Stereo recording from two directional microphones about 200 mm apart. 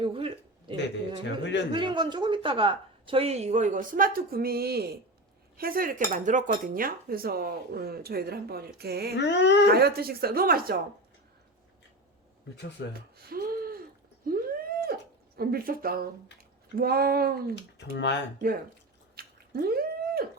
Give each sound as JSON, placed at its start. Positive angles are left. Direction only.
{"t": 0.0, "sound": "a woman's voice", "side_deg": -25}
{"t": 5.5, "sound": "cutlery", "side_deg": -45}
{"t": 9.1, "sound": "dog", "side_deg": 60}
{"t": 9.7, "sound": "cutlery", "side_deg": -50}
{"t": 13.1, "sound": "a sound", "side_deg": -50}
{"t": 15.4, "sound": "cutlery", "side_deg": -50}
{"t": 17.9, "sound": "dog", "side_deg": 60}
{"t": 19.1, "sound": "a sound", "side_deg": -50}